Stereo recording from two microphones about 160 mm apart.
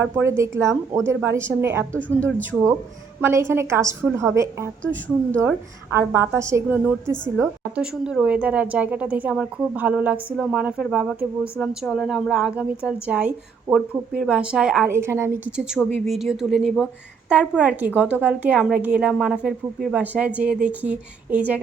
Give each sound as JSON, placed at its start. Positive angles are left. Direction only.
{"t": 0.0, "sound": "a woman's voice", "side_deg": -15}
{"t": 1.9, "sound": "speech", "side_deg": 10}
{"t": 3.2, "sound": "a woman's voice", "side_deg": -15}
{"t": 4.8, "sound": "speech", "side_deg": 10}
{"t": 5.9, "sound": "a woman's voice", "side_deg": -15}
{"t": 14.8, "sound": "a woman's voice", "side_deg": -15}